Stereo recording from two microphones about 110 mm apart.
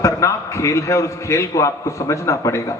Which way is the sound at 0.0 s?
25° left (ahead or behind).